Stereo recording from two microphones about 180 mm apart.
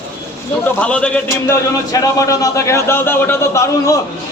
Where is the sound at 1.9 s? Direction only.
20° left (ahead or behind).